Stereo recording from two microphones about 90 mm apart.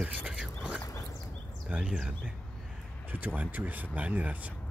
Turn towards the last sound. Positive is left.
turn(degrees=-20)  # may be behind; listen again after turning